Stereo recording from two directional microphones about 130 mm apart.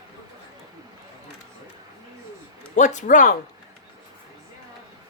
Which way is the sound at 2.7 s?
70° left (ahead or behind).